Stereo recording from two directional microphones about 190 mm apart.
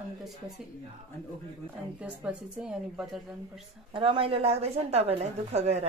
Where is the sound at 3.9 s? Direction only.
30° right (ahead or behind).